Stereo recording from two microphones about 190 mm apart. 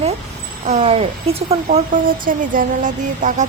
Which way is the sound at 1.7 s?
45° right (ahead or behind).